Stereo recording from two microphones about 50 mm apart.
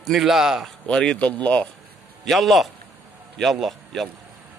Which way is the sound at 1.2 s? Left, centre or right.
Left.